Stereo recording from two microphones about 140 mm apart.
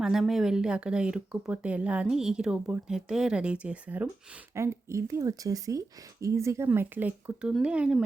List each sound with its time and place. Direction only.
0.0 s a woman's voice: 5° right (ahead or behind)